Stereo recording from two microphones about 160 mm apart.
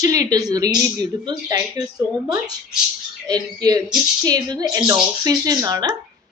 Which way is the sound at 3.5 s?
20° right (ahead or behind).